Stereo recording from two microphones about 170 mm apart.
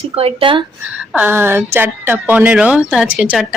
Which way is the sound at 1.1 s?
10° right (ahead or behind).